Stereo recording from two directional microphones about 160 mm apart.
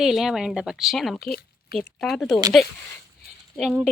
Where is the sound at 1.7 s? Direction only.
Centre (ahead or behind).